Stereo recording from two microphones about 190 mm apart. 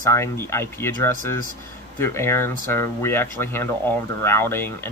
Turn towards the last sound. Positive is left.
turn(degrees=10)  # may be behind; listen again after turning